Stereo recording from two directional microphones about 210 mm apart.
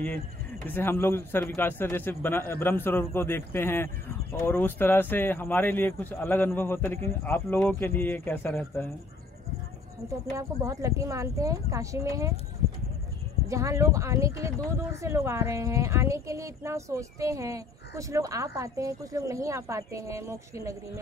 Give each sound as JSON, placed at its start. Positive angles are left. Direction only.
{"t": 0.7, "sound": "a man's voice", "side_deg": 10}
{"t": 10.3, "sound": "speech", "side_deg": -15}
{"t": 13.5, "sound": "speech", "side_deg": -15}